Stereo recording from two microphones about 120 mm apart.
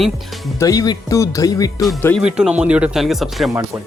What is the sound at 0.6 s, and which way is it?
Speech, 30° left (ahead or behind).